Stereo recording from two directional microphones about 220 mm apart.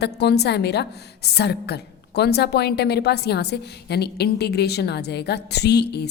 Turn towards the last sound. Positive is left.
turn(degrees=50)  # may be behind; listen again after turning